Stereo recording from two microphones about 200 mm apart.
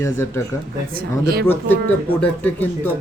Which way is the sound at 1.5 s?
10° left (ahead or behind).